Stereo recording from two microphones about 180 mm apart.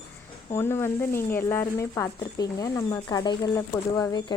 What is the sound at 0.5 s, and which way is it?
Speech, 15° left (ahead or behind).